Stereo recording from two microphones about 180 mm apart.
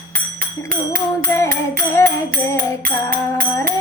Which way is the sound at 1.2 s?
15° left (ahead or behind).